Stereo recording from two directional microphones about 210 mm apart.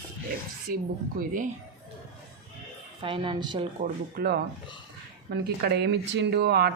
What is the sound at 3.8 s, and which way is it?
Speech, 45° right (ahead or behind).